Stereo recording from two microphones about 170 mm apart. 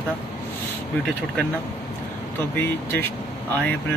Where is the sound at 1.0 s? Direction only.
10° left (ahead or behind).